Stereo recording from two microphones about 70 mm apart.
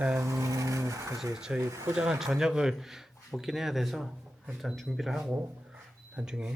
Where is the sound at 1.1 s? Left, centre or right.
Centre.